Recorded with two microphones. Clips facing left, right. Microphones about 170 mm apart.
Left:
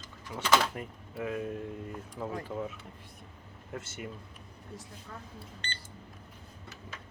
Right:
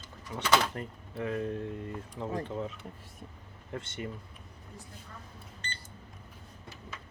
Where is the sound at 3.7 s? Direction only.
5° left (ahead or behind).